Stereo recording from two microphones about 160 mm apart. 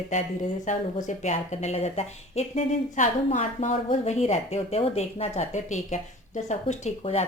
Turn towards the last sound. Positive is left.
turn(degrees=40)  # may be behind; listen again after turning